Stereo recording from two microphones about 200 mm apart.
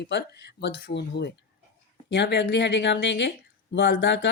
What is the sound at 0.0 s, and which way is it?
Speech, 60° left (ahead or behind).